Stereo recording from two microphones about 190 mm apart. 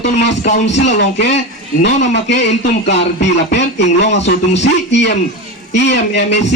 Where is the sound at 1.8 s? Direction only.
65° left (ahead or behind).